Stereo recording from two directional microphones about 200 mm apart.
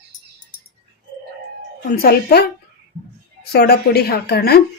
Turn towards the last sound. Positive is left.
turn(degrees=50)  # may be behind; listen again after turning